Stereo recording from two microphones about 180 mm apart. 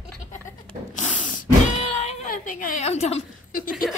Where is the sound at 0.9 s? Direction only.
40° left (ahead or behind).